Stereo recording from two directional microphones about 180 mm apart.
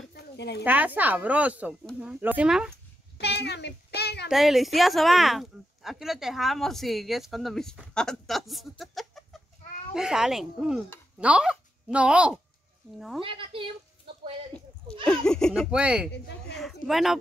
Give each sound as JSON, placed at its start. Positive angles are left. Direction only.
{"t": 0.1, "sound": "a sound", "side_deg": 65}
{"t": 0.7, "sound": "speech", "side_deg": -10}
{"t": 3.2, "sound": "a child's voice", "side_deg": 70}
{"t": 4.3, "sound": "speech", "side_deg": 0}
{"t": 13.2, "sound": "a woman's voice", "side_deg": -30}
{"t": 15.0, "sound": "speech", "side_deg": 5}